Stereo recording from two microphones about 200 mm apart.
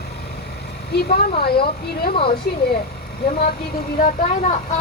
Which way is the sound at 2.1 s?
25° left (ahead or behind).